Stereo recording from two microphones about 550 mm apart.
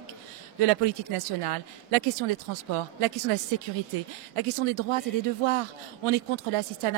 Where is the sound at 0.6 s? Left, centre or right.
Right.